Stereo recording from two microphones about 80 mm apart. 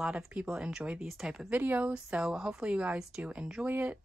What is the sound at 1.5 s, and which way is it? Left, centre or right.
Speech, right.